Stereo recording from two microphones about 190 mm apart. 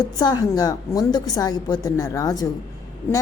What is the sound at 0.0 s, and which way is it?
A woman's voice, 20° left (ahead or behind).